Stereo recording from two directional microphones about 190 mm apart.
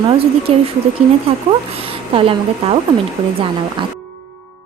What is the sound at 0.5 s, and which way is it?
Speech, 35° right (ahead or behind).